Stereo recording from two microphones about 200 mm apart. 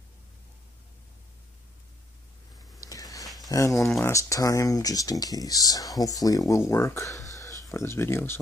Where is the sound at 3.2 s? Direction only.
Centre (ahead or behind).